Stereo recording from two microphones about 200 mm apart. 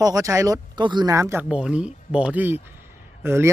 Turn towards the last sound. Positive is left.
turn(degrees=-10)  # may be behind; listen again after turning